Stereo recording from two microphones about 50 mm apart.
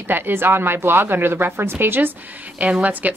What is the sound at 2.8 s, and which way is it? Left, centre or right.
Speech, right.